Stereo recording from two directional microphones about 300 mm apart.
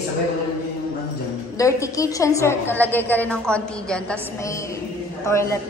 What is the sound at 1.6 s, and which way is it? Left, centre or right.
A woman's voice, centre.